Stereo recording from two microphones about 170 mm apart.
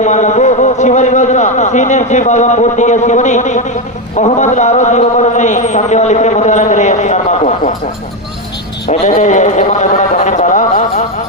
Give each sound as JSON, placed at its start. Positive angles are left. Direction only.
{"t": 0.0, "sound": "a man's voice", "side_deg": 45}
{"t": 8.9, "sound": "a man's voice", "side_deg": 40}